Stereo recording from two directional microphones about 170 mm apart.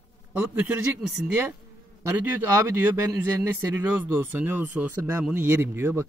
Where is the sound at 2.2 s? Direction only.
10° right (ahead or behind).